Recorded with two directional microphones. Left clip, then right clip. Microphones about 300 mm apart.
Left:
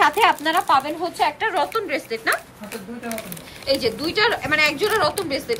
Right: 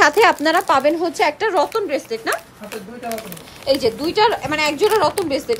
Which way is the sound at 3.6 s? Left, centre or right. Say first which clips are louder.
Right 4 dB; centre.